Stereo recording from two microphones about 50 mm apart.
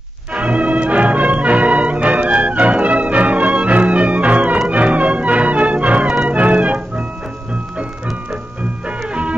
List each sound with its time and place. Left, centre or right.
0.3 s music: right
8.8 s music: right